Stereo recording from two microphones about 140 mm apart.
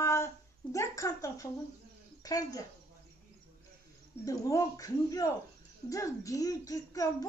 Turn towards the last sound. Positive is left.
turn(degrees=25)  # may be behind; listen again after turning